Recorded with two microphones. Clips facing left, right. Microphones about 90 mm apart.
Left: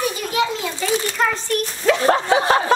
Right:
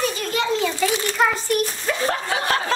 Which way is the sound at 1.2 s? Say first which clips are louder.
Right 2 dB; 5° right (ahead or behind).